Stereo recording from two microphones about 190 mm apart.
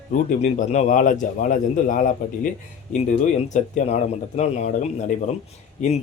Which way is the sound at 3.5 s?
40° left (ahead or behind).